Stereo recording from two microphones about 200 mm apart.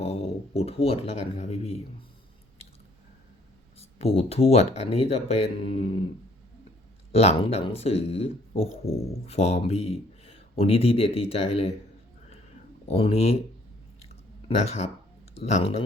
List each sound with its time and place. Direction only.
0.0 s speech: 30° left (ahead or behind)
3.8 s speech: 30° left (ahead or behind)
7.1 s speech: 30° left (ahead or behind)
12.9 s speech: 30° left (ahead or behind)
14.0 s a sound: 30° left (ahead or behind)
15.4 s speech: 35° left (ahead or behind)